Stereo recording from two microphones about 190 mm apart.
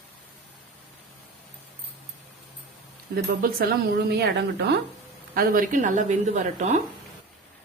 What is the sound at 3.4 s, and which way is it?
Speech, 55° right (ahead or behind).